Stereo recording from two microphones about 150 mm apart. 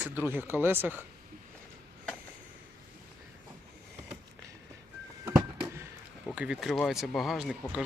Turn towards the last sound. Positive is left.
turn(degrees=0)  # may be behind; listen again after turning